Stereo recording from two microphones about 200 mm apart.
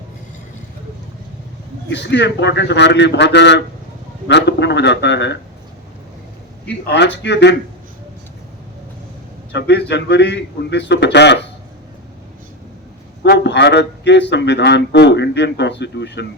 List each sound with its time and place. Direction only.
1.9 s speech: 60° left (ahead or behind)
6.8 s speech: 60° left (ahead or behind)
9.5 s speech: 55° left (ahead or behind)
13.2 s speech: 60° left (ahead or behind)